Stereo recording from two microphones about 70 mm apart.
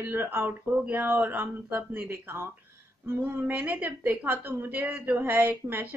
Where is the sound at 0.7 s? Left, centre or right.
Centre.